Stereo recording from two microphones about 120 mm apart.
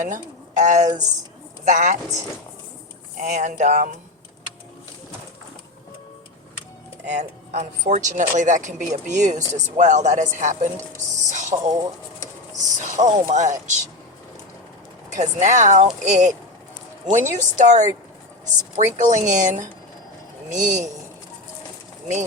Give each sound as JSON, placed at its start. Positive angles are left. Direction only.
{"t": 0.0, "sound": "speech", "side_deg": -90}
{"t": 3.2, "sound": "speech", "side_deg": -90}
{"t": 7.1, "sound": "speech", "side_deg": -70}
{"t": 11.3, "sound": "a sound", "side_deg": -85}
{"t": 12.8, "sound": "speech", "side_deg": -75}
{"t": 15.1, "sound": "speech", "side_deg": -85}